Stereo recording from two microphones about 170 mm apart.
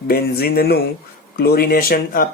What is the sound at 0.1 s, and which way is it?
Speech, 65° left (ahead or behind).